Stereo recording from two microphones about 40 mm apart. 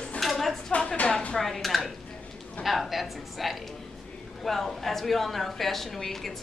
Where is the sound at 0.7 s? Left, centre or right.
Left.